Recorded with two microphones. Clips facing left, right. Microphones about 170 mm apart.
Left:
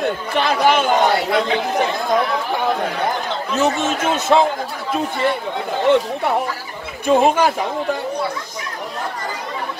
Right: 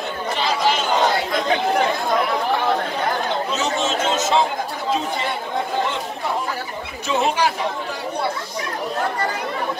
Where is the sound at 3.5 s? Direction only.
55° left (ahead or behind).